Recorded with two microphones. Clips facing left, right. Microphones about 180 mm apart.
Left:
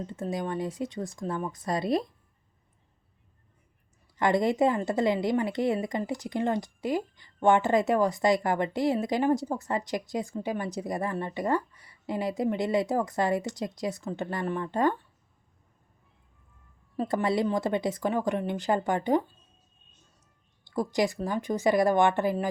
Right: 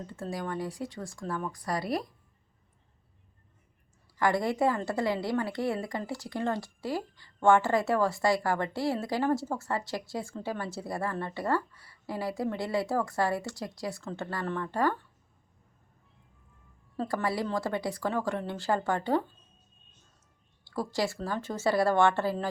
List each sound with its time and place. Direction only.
0.1 s a woman's voice: 20° left (ahead or behind)
4.2 s a woman's voice: 20° left (ahead or behind)
17.0 s a woman's voice: 20° left (ahead or behind)
20.7 s a woman's voice: 15° left (ahead or behind)